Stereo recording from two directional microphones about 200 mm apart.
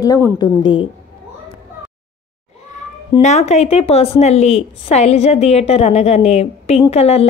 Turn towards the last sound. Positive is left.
turn(degrees=30)  # may be behind; listen again after turning